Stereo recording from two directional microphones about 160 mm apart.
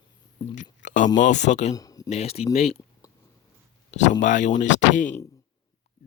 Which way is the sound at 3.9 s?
50° left (ahead or behind).